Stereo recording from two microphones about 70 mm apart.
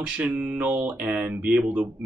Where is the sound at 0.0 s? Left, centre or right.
Centre.